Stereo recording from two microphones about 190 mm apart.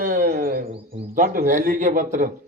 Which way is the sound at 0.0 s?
50° right (ahead or behind).